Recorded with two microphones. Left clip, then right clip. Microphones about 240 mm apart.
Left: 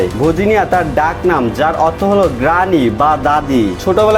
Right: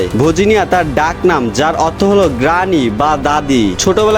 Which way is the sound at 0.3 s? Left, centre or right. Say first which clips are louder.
Right 1 dB; right.